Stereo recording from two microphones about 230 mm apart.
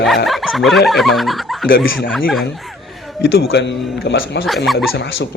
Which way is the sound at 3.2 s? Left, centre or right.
Left.